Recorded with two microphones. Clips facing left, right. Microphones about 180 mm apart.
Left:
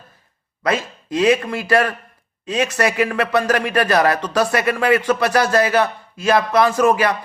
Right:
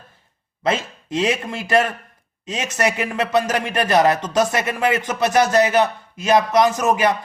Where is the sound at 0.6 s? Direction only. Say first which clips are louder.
Left 1 dB; 25° right (ahead or behind).